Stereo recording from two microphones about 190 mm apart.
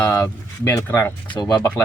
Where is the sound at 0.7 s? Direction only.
15° left (ahead or behind).